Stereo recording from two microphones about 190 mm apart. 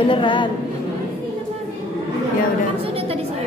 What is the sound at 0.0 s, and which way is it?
Speech, 25° left (ahead or behind).